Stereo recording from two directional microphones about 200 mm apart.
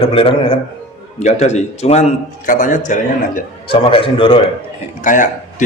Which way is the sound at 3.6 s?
25° left (ahead or behind).